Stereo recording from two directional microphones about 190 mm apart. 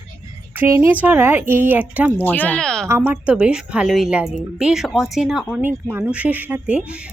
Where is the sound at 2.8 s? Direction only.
15° right (ahead or behind).